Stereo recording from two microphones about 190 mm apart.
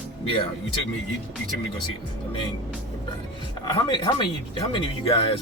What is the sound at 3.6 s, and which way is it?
Speech, 25° left (ahead or behind).